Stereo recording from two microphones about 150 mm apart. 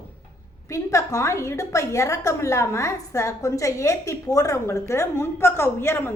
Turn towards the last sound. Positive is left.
turn(degrees=15)  # may be behind; listen again after turning